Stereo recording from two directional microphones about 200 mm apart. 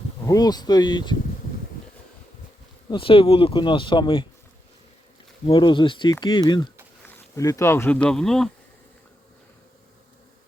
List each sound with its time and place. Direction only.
0.3 s speech: 20° left (ahead or behind)
2.9 s speech: 25° left (ahead or behind)
5.5 s speech: 25° left (ahead or behind); by 8.4 s centre (ahead or behind)